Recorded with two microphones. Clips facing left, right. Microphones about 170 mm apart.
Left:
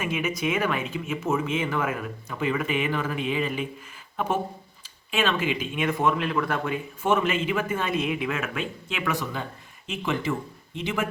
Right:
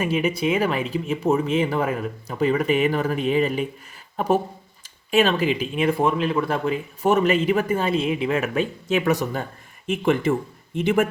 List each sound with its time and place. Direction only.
0.0 s speech: 35° right (ahead or behind)
5.1 s speech: 40° right (ahead or behind)